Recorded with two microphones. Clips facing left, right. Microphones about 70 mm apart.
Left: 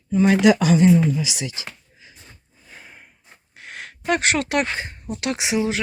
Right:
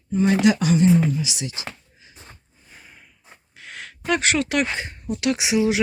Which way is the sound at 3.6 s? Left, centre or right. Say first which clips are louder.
Left 2 dB; left.